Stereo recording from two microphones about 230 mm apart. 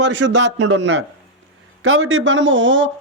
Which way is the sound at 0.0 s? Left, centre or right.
Right.